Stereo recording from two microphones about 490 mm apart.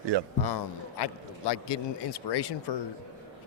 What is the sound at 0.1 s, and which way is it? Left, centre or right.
Speech, right.